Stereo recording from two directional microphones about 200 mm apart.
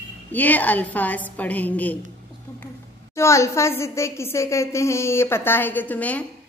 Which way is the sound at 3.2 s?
15° left (ahead or behind).